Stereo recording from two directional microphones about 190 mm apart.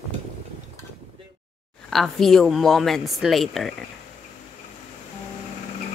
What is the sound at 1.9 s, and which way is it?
Speech, centre (ahead or behind).